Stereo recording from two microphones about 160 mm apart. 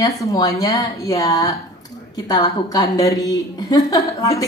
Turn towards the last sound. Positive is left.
turn(degrees=20)  # may be behind; listen again after turning